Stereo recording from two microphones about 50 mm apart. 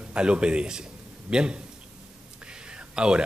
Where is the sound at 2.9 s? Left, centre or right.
Centre.